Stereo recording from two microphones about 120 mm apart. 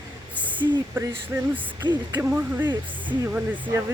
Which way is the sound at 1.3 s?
20° right (ahead or behind).